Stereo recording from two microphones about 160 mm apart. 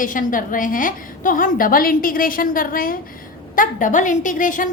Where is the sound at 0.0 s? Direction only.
55° left (ahead or behind).